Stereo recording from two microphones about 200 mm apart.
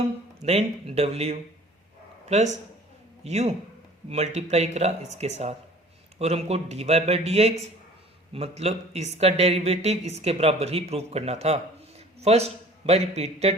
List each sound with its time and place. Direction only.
0.4 s speech: 30° right (ahead or behind)